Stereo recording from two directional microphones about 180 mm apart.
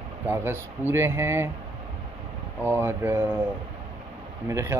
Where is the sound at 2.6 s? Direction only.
10° right (ahead or behind).